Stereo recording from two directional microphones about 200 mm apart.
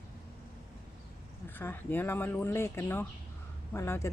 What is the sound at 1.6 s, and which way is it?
Speech, 10° left (ahead or behind).